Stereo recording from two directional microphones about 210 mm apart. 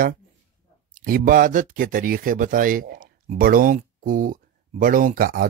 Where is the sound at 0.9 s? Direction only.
40° right (ahead or behind).